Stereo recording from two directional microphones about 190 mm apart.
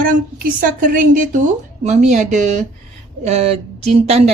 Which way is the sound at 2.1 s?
40° right (ahead or behind).